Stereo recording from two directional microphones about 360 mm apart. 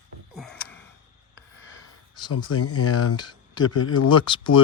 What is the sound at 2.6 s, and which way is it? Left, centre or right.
Speech, left.